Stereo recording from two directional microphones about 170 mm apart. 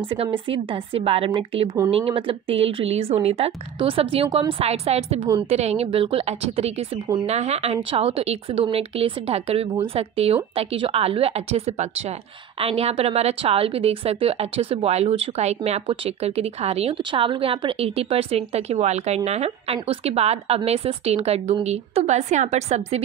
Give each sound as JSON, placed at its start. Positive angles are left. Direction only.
{"t": 0.5, "sound": "a woman's voice", "side_deg": -30}